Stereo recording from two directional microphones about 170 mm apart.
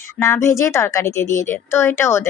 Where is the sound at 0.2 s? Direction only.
15° left (ahead or behind).